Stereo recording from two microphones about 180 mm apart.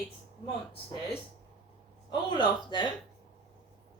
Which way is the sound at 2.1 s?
25° left (ahead or behind).